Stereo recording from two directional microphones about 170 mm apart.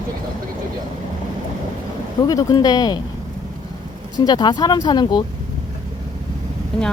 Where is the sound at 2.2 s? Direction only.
20° left (ahead or behind).